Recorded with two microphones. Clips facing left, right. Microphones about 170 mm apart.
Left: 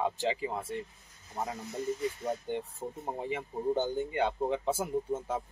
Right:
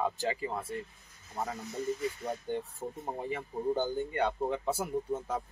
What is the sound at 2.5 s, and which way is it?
Speech, 15° left (ahead or behind).